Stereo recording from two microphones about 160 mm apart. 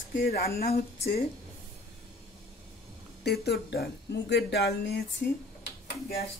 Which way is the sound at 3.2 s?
90° left.